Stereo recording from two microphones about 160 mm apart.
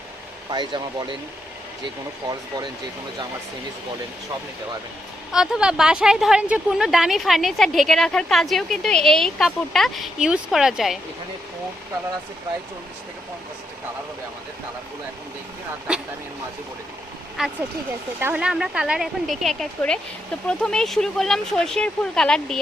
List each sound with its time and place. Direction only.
0.5 s speech: 30° right (ahead or behind)
5.3 s a woman's voice: 5° right (ahead or behind)
15.9 s a woman's voice: 5° right (ahead or behind)
17.4 s a woman's voice: 5° right (ahead or behind)